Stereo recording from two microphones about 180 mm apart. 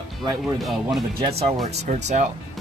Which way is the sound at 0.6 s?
Centre (ahead or behind).